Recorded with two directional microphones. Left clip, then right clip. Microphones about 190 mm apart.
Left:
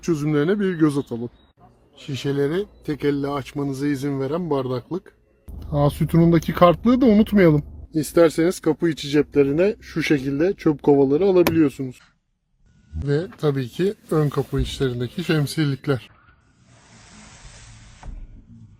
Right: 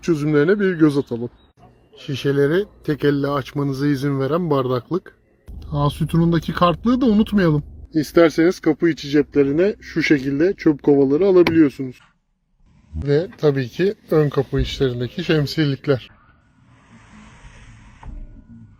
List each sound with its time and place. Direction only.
0.0 s speech: 5° left (ahead or behind)
2.0 s speech: 10° right (ahead or behind)
5.5 s speech: 30° right (ahead or behind)
7.9 s speech: 10° left (ahead or behind)